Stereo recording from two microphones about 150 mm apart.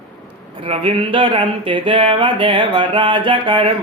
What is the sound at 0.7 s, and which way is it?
Speech, 35° right (ahead or behind).